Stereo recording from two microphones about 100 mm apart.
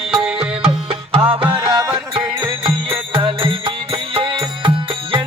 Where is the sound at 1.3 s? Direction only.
55° right (ahead or behind).